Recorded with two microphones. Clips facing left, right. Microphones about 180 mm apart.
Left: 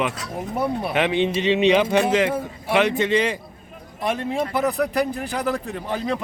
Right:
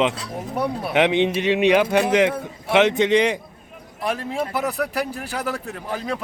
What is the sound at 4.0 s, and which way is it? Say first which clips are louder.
Speech: left 1 dB; centre (ahead or behind).